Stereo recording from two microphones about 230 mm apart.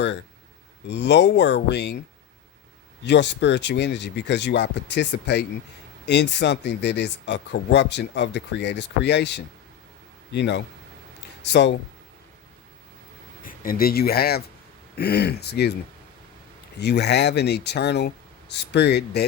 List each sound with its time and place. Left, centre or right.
0.9 s speech: left
3.0 s speech: left
13.4 s speech: left
16.8 s speech: left